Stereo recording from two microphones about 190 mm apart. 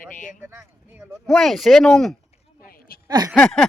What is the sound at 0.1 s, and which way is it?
Speech, 40° left (ahead or behind).